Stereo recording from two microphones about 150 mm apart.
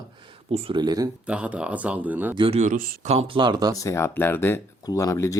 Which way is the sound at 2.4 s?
45° right (ahead or behind).